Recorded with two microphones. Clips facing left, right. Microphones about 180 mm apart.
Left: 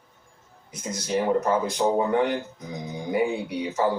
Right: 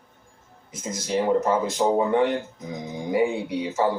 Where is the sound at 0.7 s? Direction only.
25° right (ahead or behind).